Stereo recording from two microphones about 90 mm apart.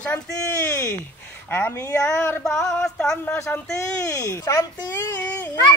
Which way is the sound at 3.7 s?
40° left (ahead or behind).